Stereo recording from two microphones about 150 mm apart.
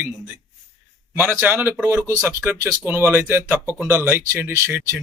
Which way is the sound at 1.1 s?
15° right (ahead or behind).